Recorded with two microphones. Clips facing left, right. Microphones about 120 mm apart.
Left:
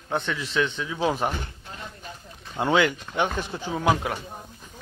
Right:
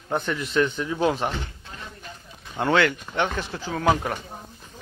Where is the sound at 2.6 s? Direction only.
10° left (ahead or behind).